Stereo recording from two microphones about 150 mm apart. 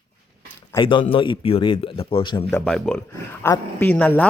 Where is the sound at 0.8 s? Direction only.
35° left (ahead or behind).